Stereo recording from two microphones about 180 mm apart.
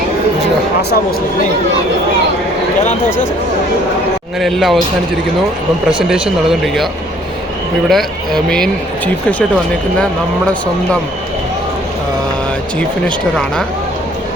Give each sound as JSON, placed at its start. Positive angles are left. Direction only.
{"t": 4.4, "sound": "speech", "side_deg": 0}
{"t": 5.9, "sound": "speech", "side_deg": -5}
{"t": 7.9, "sound": "speech", "side_deg": 0}